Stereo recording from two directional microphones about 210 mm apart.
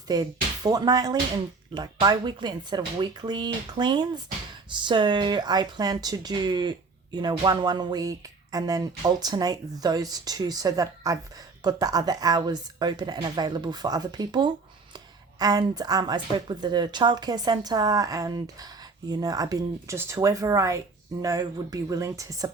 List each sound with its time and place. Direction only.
0.1 s speech: 20° right (ahead or behind)